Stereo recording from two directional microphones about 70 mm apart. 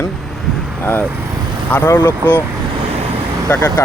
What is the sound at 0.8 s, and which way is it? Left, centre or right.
Speech, left.